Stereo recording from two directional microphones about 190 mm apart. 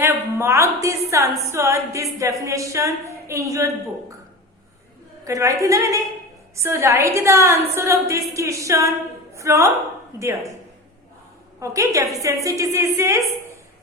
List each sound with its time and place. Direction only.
0.0 s a woman's voice: 15° right (ahead or behind)
5.2 s a woman's voice: 15° right (ahead or behind)
11.6 s a woman's voice: 15° right (ahead or behind)